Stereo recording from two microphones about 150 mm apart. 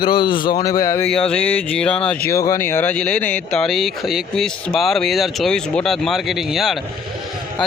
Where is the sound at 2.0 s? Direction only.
15° left (ahead or behind).